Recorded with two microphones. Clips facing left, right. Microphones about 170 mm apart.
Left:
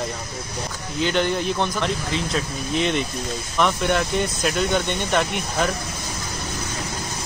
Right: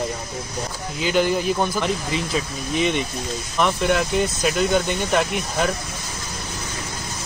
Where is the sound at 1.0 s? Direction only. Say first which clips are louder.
Right 2 dB; 5° right (ahead or behind).